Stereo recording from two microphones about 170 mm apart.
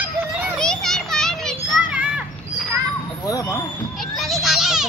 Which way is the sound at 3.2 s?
20° left (ahead or behind).